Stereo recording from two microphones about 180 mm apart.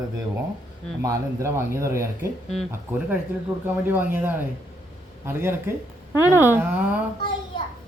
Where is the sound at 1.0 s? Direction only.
15° right (ahead or behind).